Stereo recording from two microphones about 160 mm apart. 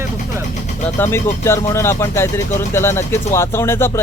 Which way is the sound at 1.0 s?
15° left (ahead or behind).